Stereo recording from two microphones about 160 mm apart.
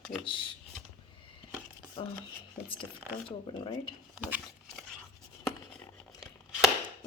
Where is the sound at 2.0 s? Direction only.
30° left (ahead or behind).